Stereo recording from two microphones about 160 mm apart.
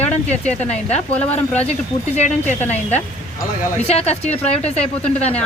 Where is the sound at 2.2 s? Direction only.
45° left (ahead or behind).